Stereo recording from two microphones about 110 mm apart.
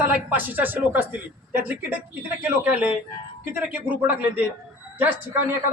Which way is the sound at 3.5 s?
15° right (ahead or behind).